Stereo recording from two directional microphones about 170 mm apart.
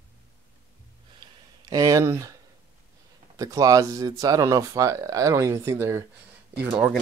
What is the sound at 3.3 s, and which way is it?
A man's voice, 20° right (ahead or behind).